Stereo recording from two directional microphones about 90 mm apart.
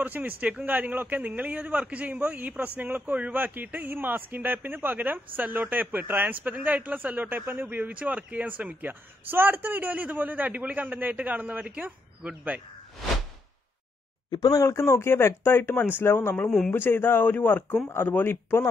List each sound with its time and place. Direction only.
0.0 s a man's voice: 15° right (ahead or behind)
14.3 s speech: 45° left (ahead or behind); by 16.4 s 20° left (ahead or behind)
16.4 s speech: 5° left (ahead or behind)
16.7 s speech: 25° left (ahead or behind)